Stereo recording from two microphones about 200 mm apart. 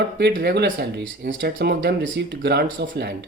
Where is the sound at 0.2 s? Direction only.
55° right (ahead or behind).